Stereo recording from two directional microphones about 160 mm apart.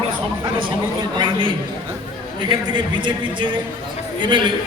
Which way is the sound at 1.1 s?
30° right (ahead or behind).